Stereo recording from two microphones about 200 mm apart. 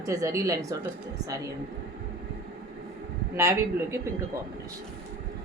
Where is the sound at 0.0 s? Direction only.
15° right (ahead or behind).